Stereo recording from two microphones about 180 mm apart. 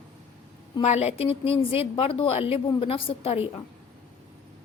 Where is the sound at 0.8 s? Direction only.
35° left (ahead or behind).